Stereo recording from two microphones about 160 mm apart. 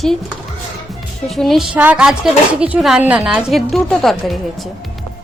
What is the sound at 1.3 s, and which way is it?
A woman's voice, centre (ahead or behind).